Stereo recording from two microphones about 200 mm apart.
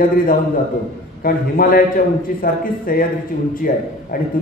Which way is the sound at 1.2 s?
45° left (ahead or behind).